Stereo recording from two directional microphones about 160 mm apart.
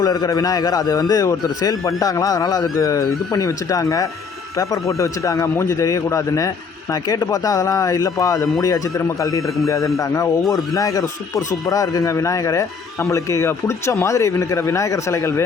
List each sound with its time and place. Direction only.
0.0 s a man's voice: 25° left (ahead or behind)